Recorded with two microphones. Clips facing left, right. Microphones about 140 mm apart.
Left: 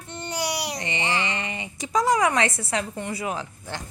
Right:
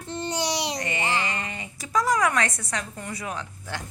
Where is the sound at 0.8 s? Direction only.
45° right (ahead or behind).